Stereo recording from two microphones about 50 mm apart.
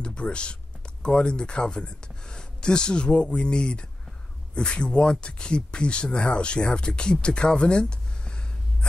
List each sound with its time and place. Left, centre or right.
0.0 s speech: left